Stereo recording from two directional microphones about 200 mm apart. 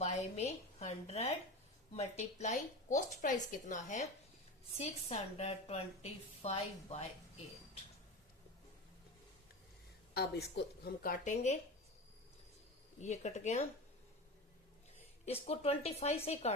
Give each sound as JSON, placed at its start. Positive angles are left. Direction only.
{"t": 0.0, "sound": "a woman's voice", "side_deg": 35}
{"t": 10.2, "sound": "a woman's voice", "side_deg": 55}
{"t": 13.0, "sound": "a woman's voice", "side_deg": 35}
{"t": 15.3, "sound": "a woman's voice", "side_deg": 30}